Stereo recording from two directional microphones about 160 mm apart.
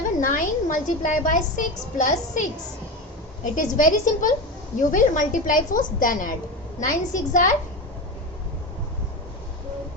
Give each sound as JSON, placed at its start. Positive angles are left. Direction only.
{"t": 0.2, "sound": "a woman's voice", "side_deg": 55}